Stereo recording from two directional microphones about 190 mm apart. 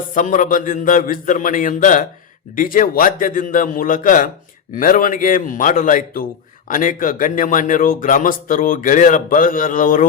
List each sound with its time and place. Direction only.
0.1 s speech: 45° left (ahead or behind)